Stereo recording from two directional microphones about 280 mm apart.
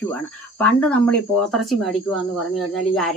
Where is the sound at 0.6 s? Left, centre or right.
Centre.